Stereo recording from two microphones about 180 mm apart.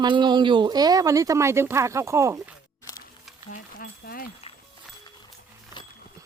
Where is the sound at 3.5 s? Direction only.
50° left (ahead or behind).